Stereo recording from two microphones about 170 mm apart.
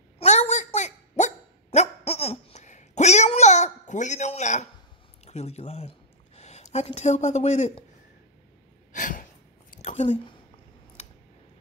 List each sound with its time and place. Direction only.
0.2 s dog: 40° left (ahead or behind)
5.2 s speech: 40° left (ahead or behind)
8.9 s a sound: 50° left (ahead or behind)